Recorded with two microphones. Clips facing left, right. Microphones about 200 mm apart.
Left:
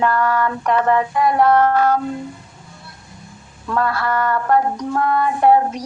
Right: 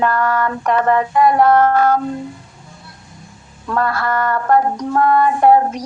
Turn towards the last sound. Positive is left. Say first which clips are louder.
# right 2 dB
turn(degrees=-45)  # may be behind; listen again after turning